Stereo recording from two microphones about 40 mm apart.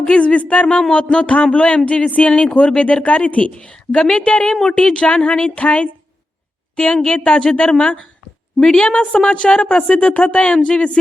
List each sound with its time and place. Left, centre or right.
0.0 s speech: left
0.8 s speech: centre
1.1 s speech: left
3.5 s speech: left
4.4 s speech: centre